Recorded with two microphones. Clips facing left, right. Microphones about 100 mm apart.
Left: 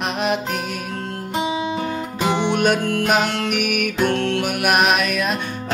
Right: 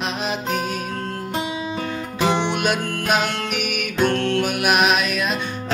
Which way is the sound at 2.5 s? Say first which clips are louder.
Left 4 dB; 45° left (ahead or behind).